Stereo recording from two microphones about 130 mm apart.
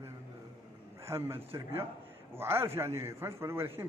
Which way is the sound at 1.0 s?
20° right (ahead or behind).